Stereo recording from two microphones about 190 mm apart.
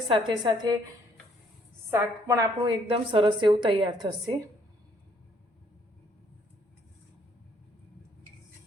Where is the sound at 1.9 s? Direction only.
15° right (ahead or behind).